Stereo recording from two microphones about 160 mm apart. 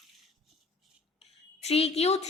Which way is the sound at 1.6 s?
40° left (ahead or behind).